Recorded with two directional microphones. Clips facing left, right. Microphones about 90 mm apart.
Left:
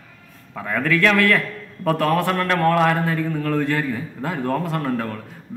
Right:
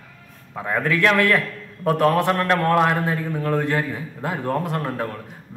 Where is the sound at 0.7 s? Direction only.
20° right (ahead or behind).